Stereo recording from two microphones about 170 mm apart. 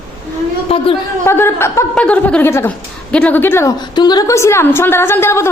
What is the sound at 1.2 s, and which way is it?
A woman's voice, 15° left (ahead or behind).